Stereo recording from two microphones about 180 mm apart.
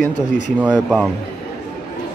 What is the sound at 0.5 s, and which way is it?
Speech, 5° right (ahead or behind).